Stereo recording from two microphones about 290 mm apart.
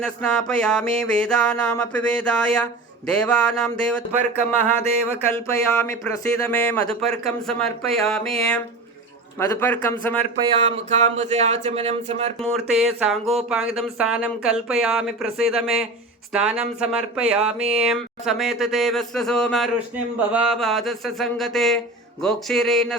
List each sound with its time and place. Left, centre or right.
0.0 s a man's voice: centre
10.4 s speech: right
12.4 s speech: centre